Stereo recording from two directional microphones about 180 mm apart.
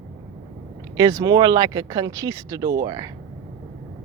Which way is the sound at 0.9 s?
20° right (ahead or behind).